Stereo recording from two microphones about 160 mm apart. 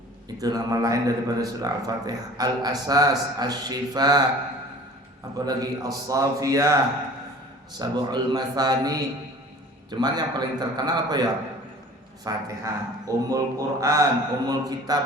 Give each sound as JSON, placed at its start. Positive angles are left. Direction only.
{"t": 0.3, "sound": "a man's voice", "side_deg": -25}
{"t": 5.5, "sound": "a man's voice", "side_deg": -20}